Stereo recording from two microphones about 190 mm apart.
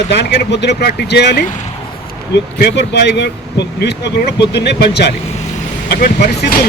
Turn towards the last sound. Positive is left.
turn(degrees=55)  # may be behind; listen again after turning